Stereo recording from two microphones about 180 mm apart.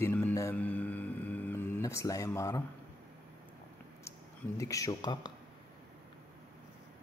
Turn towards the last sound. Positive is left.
turn(degrees=25)  # may be behind; listen again after turning